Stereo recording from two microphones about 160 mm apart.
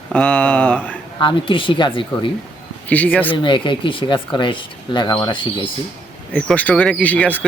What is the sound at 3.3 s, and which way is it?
Speech, 30° left (ahead or behind).